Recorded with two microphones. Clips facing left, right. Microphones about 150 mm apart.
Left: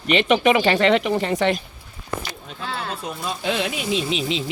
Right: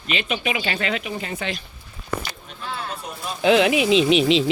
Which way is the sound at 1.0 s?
70° left (ahead or behind).